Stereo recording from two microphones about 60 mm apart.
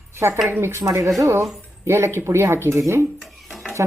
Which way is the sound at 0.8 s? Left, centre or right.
Right.